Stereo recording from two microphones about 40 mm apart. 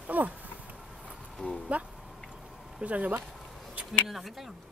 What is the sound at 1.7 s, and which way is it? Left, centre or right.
Speech, right.